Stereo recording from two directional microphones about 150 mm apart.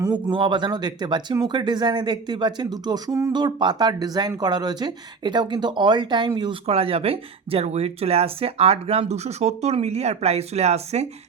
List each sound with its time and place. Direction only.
0.3 s speech: 35° right (ahead or behind)
6.7 s speech: 40° right (ahead or behind)